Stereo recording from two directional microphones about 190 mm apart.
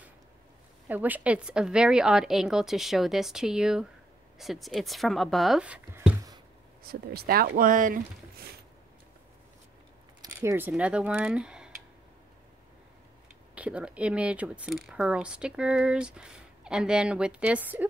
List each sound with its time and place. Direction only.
0.8 s speech: 10° right (ahead or behind)
6.9 s speech: 55° right (ahead or behind)
10.2 s speech: 15° right (ahead or behind)
13.6 s speech: 5° right (ahead or behind)